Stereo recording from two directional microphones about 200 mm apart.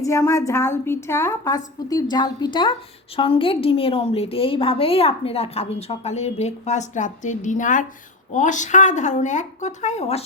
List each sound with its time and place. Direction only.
0.0 s a woman's voice: 15° left (ahead or behind); by 10.2 s 30° left (ahead or behind)